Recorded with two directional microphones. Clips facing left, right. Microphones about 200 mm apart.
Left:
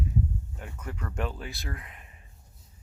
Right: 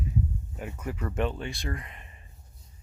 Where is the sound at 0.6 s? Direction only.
10° right (ahead or behind).